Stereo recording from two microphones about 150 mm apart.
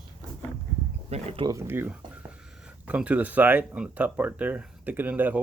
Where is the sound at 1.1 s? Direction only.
45° right (ahead or behind).